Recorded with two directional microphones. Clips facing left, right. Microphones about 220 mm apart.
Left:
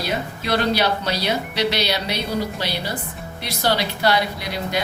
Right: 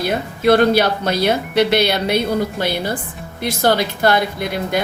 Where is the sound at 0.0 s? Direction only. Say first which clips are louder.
Right 8 dB; 55° right (ahead or behind).